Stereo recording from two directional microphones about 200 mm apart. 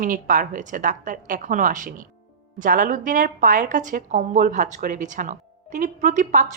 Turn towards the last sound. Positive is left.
turn(degrees=-40)  # may be behind; listen again after turning